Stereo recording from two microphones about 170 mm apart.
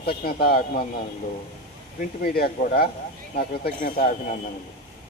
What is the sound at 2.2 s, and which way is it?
Speech, 60° left (ahead or behind).